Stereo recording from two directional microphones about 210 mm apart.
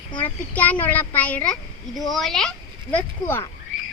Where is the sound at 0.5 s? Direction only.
5° left (ahead or behind).